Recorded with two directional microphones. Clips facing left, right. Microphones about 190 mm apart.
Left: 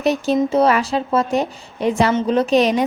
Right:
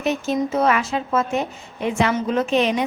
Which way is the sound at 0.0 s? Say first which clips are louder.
Left 4 dB; 35° left (ahead or behind).